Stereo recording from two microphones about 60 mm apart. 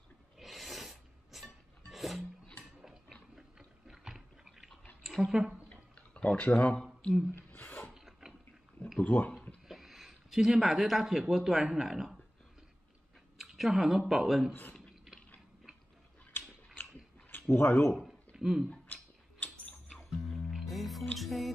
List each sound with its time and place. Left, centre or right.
0.4 s a sound: centre
3.3 s a sound: centre
5.1 s speech: centre
5.7 s bathtub: centre
6.3 s speech: left
7.3 s a sound: left
7.9 s a sound: centre
9.0 s speech: left
9.7 s speech: centre
13.4 s speech: centre
17.3 s speech: left
18.3 s speech: centre
20.2 s music: centre